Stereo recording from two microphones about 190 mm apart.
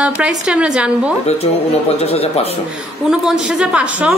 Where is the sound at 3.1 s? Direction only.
5° right (ahead or behind).